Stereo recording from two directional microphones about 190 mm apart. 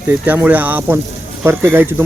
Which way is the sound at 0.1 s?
10° right (ahead or behind).